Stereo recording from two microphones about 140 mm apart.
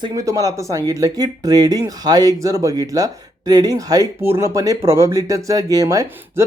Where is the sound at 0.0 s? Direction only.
25° right (ahead or behind).